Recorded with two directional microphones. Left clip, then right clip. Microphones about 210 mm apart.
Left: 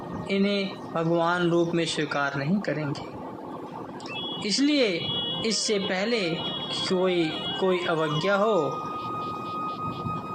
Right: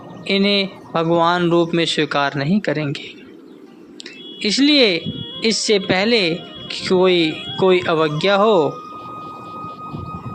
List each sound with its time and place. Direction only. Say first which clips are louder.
0.3 s speech: right 10 dB; 35° right (ahead or behind)
4.4 s speech: right 10 dB; 35° right (ahead or behind)
7.2 s speech: right 7 dB; centre (ahead or behind)
7.6 s speech: right 10 dB; 40° right (ahead or behind)
9.0 s vehicle: even; centre (ahead or behind)